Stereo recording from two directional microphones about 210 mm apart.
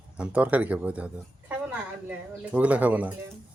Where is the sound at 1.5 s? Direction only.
10° right (ahead or behind).